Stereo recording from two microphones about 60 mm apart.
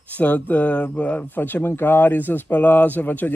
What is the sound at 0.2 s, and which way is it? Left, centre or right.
Speech, left.